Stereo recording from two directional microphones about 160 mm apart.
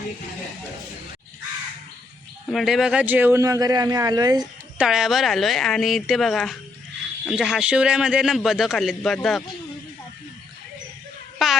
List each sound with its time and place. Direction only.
2.5 s a man's voice: centre (ahead or behind); by 4.4 s 25° right (ahead or behind)
4.8 s a man's voice: centre (ahead or behind)
11.4 s babbling: centre (ahead or behind)